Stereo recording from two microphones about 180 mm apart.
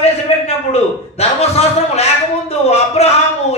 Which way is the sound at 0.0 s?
35° left (ahead or behind).